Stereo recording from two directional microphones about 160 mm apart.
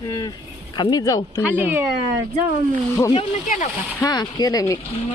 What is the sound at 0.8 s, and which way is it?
Speech, 25° left (ahead or behind).